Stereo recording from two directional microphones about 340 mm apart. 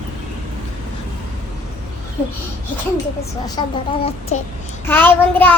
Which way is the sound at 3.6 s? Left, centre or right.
Centre.